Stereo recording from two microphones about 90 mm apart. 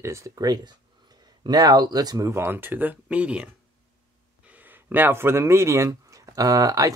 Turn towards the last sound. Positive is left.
turn(degrees=-40)  # may be behind; listen again after turning